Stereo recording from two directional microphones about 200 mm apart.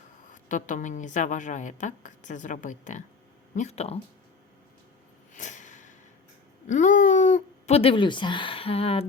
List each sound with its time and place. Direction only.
0.4 s a woman's voice: 40° left (ahead or behind)
5.3 s a sound: 40° left (ahead or behind)
6.7 s speech: 40° left (ahead or behind)